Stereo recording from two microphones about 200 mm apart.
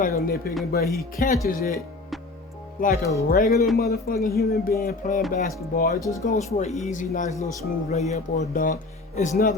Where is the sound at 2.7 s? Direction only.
45° left (ahead or behind).